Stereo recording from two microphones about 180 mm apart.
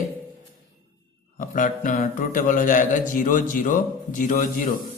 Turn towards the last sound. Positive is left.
turn(degrees=50)  # may be behind; listen again after turning